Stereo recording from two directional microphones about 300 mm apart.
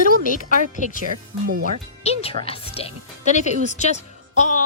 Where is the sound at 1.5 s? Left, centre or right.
Right.